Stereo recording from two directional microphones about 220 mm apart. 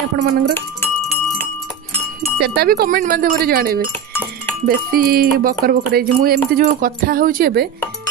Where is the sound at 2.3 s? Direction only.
45° right (ahead or behind).